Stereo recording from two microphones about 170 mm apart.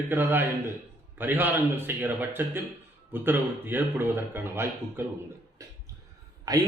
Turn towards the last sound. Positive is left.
turn(degrees=-20)  # may be behind; listen again after turning